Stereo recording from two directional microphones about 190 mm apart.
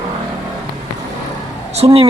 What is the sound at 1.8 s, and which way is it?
Speech, 30° right (ahead or behind).